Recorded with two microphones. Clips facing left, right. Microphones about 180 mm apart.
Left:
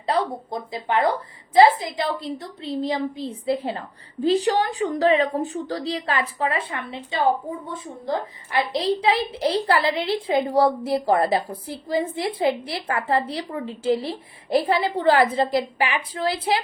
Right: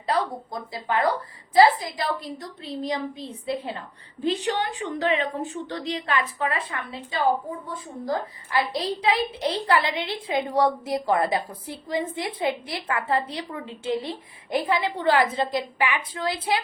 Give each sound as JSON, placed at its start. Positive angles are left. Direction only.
{"t": 0.0, "sound": "a woman's voice", "side_deg": 25}